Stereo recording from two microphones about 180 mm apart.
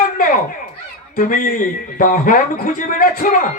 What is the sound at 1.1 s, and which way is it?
A woman's voice, 45° left (ahead or behind).